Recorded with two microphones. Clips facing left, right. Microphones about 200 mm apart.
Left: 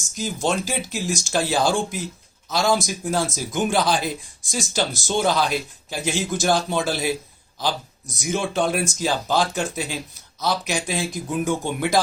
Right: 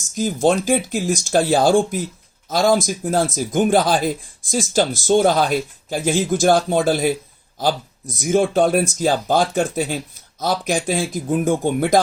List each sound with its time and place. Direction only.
0.2 s speech: 50° right (ahead or behind)
8.1 s speech: 50° right (ahead or behind)